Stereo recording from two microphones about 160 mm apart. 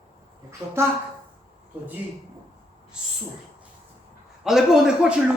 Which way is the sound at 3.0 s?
5° right (ahead or behind).